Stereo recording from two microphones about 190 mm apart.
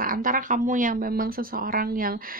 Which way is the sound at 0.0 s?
45° right (ahead or behind).